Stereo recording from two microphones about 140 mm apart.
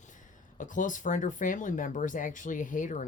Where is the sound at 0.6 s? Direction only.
70° left (ahead or behind).